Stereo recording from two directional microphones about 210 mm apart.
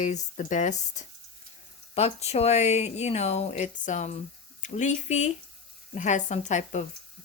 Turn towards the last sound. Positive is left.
turn(degrees=35)  # may be behind; listen again after turning